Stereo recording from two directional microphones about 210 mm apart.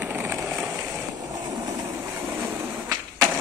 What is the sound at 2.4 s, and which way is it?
Arrow, 15° right (ahead or behind).